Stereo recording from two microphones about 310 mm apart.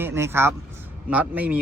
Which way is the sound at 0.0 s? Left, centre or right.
Centre.